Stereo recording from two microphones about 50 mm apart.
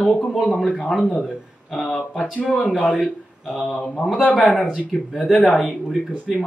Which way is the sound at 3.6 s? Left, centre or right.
Left.